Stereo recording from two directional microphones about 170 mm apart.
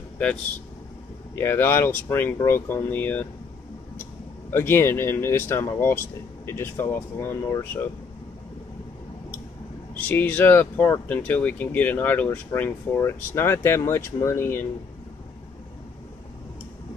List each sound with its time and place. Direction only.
1.3 s speech: 15° left (ahead or behind)
4.5 s speech: 15° left (ahead or behind)
9.9 s speech: 10° left (ahead or behind)